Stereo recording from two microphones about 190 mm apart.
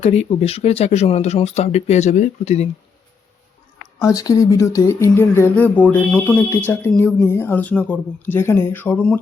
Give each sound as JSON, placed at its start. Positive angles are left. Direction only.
{"t": 0.0, "sound": "speech", "side_deg": 35}
{"t": 4.0, "sound": "speech", "side_deg": 15}